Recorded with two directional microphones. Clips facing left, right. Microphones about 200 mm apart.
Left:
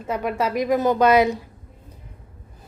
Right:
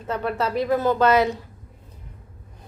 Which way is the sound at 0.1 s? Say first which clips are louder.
Left 1 dB; 10° left (ahead or behind).